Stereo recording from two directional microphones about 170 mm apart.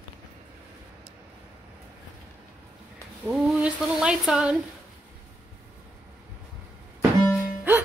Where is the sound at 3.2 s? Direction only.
5° right (ahead or behind).